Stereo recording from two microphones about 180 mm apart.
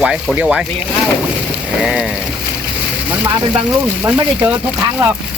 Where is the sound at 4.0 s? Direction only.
5° right (ahead or behind).